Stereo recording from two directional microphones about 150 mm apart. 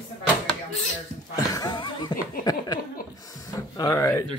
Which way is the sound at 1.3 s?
25° left (ahead or behind).